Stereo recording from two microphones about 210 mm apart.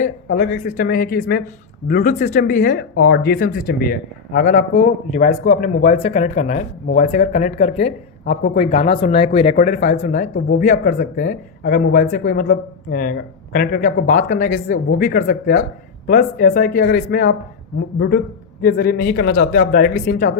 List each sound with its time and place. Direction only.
0.0 s speech: 40° left (ahead or behind)